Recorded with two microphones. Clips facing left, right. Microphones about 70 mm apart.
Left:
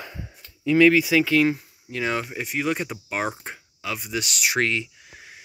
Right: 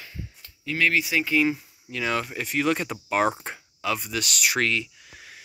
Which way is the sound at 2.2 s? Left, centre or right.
Centre.